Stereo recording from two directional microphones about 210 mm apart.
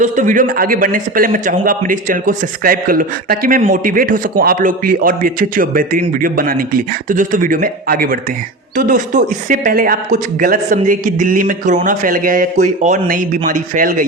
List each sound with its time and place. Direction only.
0.0 s a man's voice: 35° right (ahead or behind)